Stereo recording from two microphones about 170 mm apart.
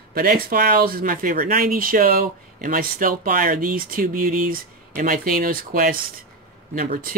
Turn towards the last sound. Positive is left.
turn(degrees=-60)  # may be behind; listen again after turning